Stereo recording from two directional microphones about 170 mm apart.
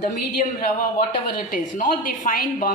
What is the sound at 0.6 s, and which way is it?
A woman's voice, 55° left (ahead or behind).